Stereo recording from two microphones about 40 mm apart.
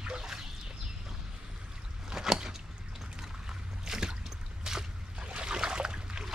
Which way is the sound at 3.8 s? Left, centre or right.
Centre.